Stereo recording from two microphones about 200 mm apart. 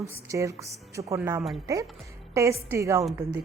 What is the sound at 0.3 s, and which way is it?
A woman's voice, 15° right (ahead or behind).